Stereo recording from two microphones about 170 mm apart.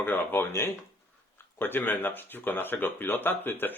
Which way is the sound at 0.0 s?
10° left (ahead or behind).